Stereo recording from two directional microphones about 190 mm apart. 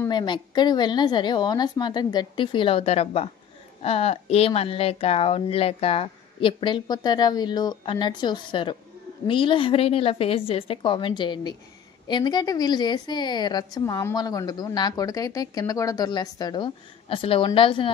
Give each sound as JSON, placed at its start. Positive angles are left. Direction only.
{"t": 0.1, "sound": "a woman's voice", "side_deg": 25}